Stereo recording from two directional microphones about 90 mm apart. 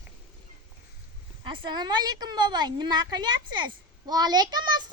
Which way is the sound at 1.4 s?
65° right (ahead or behind).